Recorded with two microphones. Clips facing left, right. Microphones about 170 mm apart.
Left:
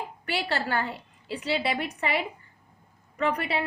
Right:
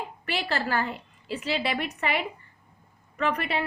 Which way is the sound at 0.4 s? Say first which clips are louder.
Right 2 dB; 25° left (ahead or behind).